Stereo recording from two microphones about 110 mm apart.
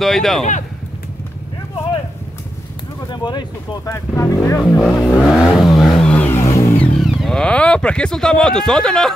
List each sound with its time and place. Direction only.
0.0 s speech: centre (ahead or behind)
3.1 s speech: 40° left (ahead or behind)
3.9 s speech: 25° left (ahead or behind)
4.6 s speech: centre (ahead or behind)
5.3 s vehicle: centre (ahead or behind); by 6.8 s 25° left (ahead or behind)
7.0 s a sound: centre (ahead or behind)
7.3 s speech: 10° left (ahead or behind)